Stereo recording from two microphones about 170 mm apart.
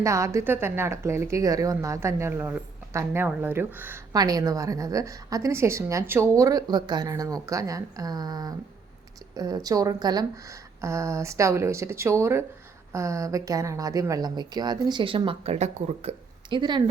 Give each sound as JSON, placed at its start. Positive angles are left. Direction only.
{"t": 0.0, "sound": "a woman's voice", "side_deg": -20}